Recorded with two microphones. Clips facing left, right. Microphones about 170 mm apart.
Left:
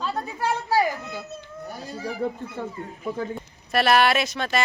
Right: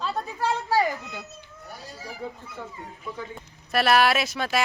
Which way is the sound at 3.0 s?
40° left (ahead or behind).